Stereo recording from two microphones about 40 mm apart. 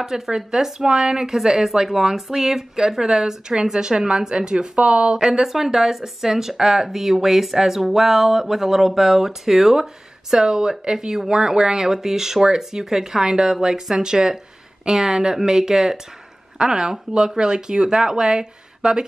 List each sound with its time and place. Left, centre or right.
0.0 s speech: centre; by 5.1 s right
5.1 s speech: centre